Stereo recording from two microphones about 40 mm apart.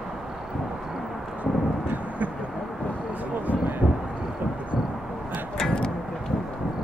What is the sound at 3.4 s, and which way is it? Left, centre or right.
Vehicle, right.